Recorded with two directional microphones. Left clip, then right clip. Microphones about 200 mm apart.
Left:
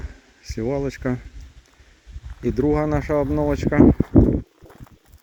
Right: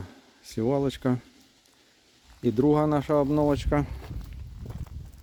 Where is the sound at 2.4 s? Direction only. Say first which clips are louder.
Left 2 dB; centre (ahead or behind).